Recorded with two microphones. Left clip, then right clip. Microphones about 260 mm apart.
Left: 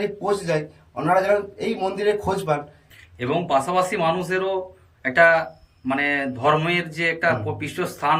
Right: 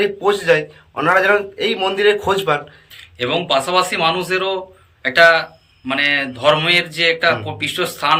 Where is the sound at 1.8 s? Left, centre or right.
Right.